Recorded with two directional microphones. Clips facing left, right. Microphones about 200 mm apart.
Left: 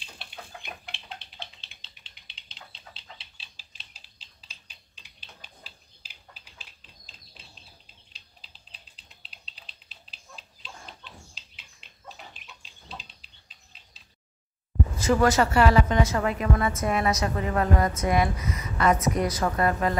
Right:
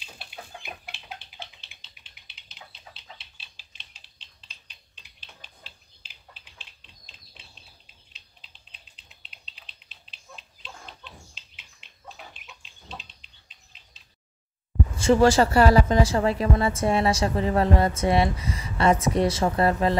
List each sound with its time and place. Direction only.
0.6 s chicken: 5° right (ahead or behind)
3.0 s a sound: centre (ahead or behind)
10.6 s chicken: centre (ahead or behind)
15.0 s a woman's voice: 30° right (ahead or behind)